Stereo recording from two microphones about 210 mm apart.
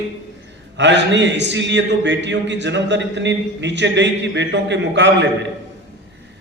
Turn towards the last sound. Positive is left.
turn(degrees=-55)  # may be behind; listen again after turning